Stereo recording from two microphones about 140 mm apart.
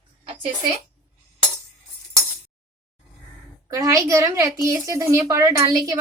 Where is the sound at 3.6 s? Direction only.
25° right (ahead or behind).